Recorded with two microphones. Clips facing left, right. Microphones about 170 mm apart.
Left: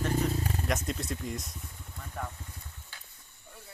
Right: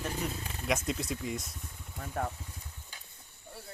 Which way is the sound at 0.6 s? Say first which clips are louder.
Right 1 dB; centre (ahead or behind).